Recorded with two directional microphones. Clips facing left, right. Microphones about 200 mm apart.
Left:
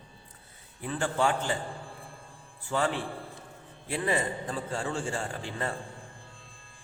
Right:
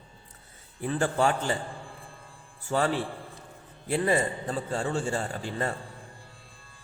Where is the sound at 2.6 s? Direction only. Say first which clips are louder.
Right 3 dB; 40° right (ahead or behind).